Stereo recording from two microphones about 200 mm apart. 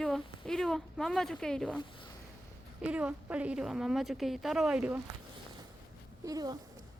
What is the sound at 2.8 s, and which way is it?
Speech, 5° right (ahead or behind).